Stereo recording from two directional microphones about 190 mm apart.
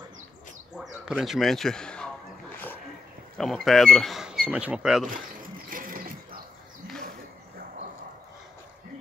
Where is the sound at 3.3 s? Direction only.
Centre (ahead or behind).